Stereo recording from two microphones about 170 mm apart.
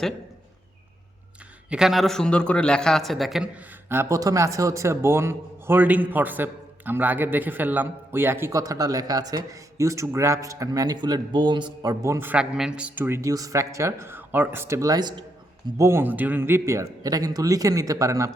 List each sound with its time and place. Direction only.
1.7 s a man's voice: centre (ahead or behind); by 18.3 s 20° right (ahead or behind)